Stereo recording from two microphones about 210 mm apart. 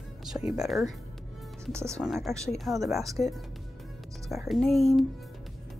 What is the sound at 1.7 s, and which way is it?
Speech, 10° right (ahead or behind).